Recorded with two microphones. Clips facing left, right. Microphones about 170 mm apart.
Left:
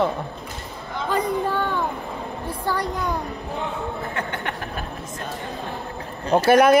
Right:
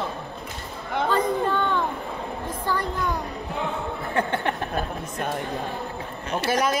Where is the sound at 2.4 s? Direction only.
10° left (ahead or behind).